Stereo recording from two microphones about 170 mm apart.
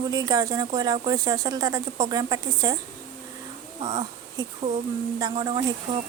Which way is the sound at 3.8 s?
25° right (ahead or behind).